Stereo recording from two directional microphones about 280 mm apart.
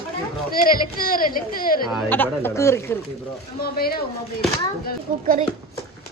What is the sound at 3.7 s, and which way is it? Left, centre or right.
Speech, left.